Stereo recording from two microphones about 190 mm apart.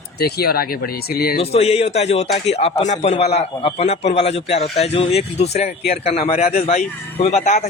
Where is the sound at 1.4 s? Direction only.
35° left (ahead or behind).